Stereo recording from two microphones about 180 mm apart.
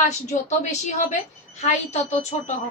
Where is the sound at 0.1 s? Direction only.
40° left (ahead or behind).